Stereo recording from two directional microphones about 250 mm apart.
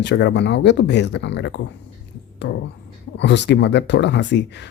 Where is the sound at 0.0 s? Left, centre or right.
Left.